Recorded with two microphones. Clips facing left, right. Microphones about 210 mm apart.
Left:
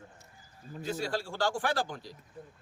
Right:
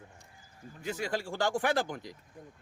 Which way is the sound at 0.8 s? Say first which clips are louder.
Even; 15° right (ahead or behind).